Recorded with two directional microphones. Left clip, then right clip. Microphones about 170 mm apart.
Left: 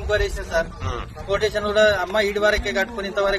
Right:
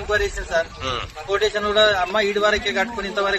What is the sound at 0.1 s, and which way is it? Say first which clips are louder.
A man's voice: right 1 dB; 35° left (ahead or behind).